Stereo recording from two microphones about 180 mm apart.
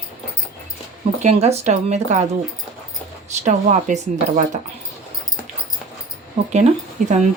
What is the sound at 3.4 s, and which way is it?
Speech, 40° right (ahead or behind).